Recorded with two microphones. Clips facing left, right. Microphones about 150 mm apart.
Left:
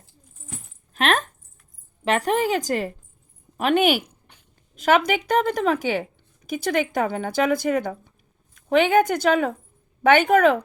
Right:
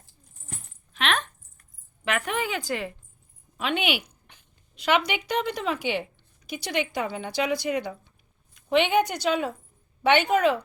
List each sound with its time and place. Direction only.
0.9 s keys jangling: 45° left (ahead or behind)
2.0 s a woman's voice: 35° left (ahead or behind); by 10.6 s 55° left (ahead or behind)